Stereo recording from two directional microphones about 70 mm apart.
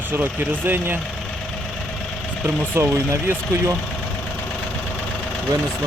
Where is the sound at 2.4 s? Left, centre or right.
Right.